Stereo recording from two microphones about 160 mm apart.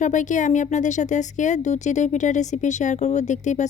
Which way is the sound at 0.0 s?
50° left (ahead or behind).